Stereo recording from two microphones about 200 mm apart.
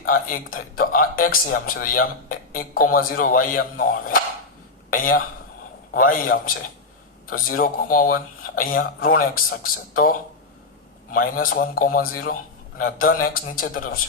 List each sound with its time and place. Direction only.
0.0 s a man's voice: 45° left (ahead or behind)
5.9 s a man's voice: 45° left (ahead or behind)